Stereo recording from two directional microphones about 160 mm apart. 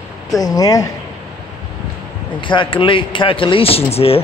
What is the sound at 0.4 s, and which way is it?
Speech, 20° left (ahead or behind).